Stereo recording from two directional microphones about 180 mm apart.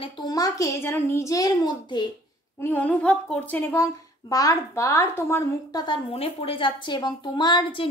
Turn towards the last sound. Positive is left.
turn(degrees=25)  # may be behind; listen again after turning